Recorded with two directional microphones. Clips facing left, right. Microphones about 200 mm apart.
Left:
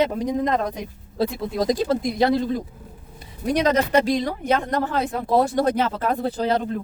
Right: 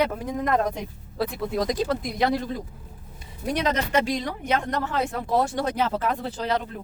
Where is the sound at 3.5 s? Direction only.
40° left (ahead or behind).